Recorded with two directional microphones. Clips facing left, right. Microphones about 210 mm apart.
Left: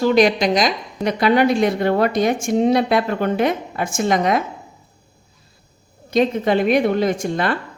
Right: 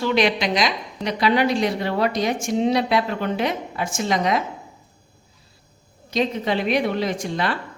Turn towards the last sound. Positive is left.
turn(degrees=50)  # may be behind; listen again after turning